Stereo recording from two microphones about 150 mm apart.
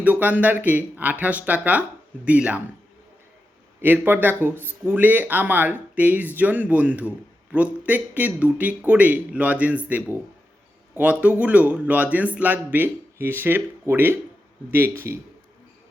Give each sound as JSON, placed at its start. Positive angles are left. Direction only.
{"t": 0.0, "sound": "speech", "side_deg": -10}
{"t": 3.8, "sound": "speech", "side_deg": -15}